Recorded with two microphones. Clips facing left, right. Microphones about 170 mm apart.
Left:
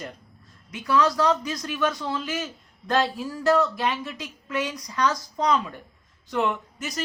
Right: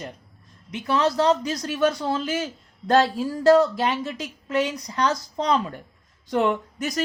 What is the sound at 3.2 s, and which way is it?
Speech, 30° right (ahead or behind).